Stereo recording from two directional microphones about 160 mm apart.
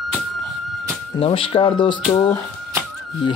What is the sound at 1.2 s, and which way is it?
Speech, 35° left (ahead or behind).